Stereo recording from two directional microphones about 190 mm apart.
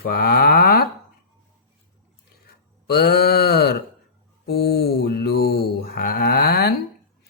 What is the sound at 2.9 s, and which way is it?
Mantra, 55° left (ahead or behind).